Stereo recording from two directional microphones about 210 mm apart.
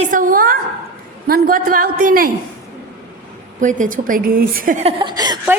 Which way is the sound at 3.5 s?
35° right (ahead or behind).